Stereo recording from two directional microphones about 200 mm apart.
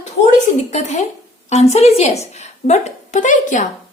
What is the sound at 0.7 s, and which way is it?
Speech, 35° left (ahead or behind).